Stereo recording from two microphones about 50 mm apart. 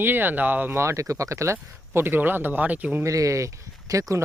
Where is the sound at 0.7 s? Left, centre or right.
Right.